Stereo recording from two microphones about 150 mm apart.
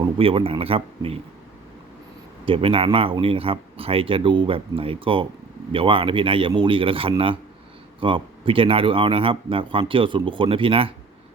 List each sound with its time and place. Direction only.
0.2 s speech: 40° right (ahead or behind)
2.5 s speech: 35° right (ahead or behind)